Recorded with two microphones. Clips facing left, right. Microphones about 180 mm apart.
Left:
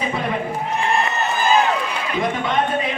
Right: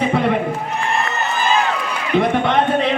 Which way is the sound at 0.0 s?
65° right (ahead or behind).